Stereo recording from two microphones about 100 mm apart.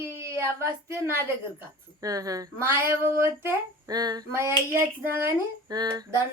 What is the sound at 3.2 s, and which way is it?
Speech, 25° right (ahead or behind).